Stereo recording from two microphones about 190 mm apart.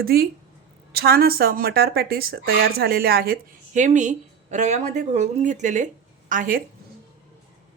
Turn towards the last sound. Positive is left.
turn(degrees=-45)  # may be behind; listen again after turning